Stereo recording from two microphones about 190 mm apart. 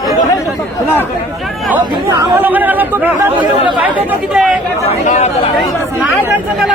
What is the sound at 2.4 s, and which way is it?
Speech, 10° right (ahead or behind).